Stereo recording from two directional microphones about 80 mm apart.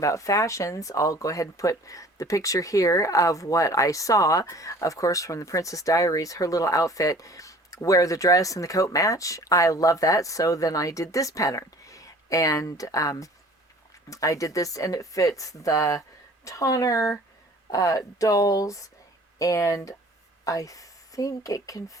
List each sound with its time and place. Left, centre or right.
0.0 s a woman's voice: left